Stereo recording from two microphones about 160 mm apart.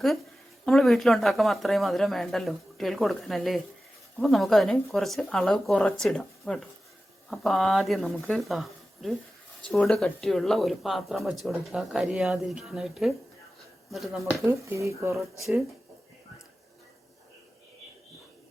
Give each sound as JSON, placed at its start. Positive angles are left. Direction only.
{"t": 0.6, "sound": "speech", "side_deg": 0}
{"t": 14.4, "sound": "speech", "side_deg": -20}